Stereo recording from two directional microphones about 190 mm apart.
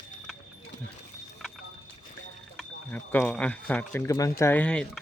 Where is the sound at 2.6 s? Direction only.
10° left (ahead or behind).